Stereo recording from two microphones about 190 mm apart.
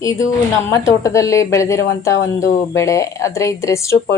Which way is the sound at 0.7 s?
15° left (ahead or behind).